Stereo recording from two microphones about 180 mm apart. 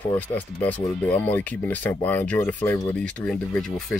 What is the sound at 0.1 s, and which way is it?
Speech, 10° left (ahead or behind).